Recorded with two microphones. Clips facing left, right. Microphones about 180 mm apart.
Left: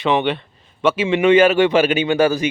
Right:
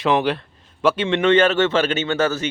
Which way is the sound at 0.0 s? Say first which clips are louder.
Left 1 dB; centre (ahead or behind).